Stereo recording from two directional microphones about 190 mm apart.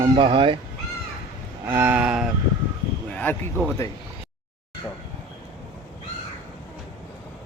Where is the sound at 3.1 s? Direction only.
10° left (ahead or behind).